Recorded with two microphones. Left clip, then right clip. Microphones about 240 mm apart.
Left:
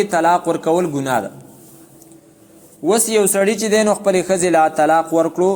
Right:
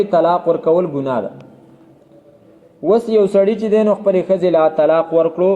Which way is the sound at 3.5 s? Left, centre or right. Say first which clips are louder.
Right 1 dB; left.